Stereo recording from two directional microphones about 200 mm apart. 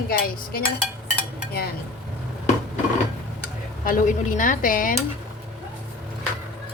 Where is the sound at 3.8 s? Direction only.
40° left (ahead or behind).